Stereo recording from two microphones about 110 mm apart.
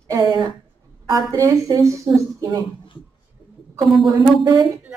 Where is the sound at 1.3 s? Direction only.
30° right (ahead or behind).